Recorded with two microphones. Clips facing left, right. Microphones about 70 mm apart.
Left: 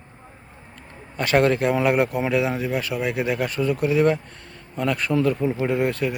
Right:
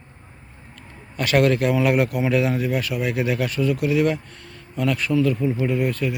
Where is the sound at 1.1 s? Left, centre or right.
Left.